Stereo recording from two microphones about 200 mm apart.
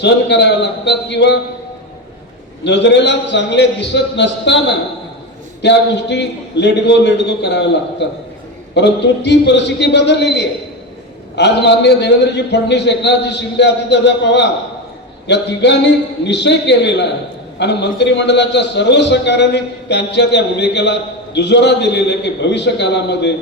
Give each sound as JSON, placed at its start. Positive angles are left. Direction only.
{"t": 0.0, "sound": "a man's voice", "side_deg": 60}
{"t": 2.6, "sound": "a man's voice", "side_deg": 60}